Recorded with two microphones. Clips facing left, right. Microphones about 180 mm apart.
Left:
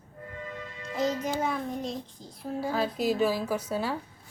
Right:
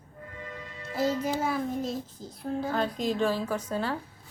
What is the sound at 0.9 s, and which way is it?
Child singing, 5° right (ahead or behind).